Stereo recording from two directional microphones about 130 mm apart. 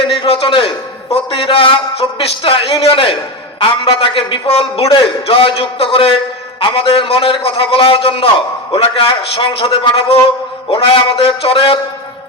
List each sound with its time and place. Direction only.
0.0 s a man's voice: 45° left (ahead or behind)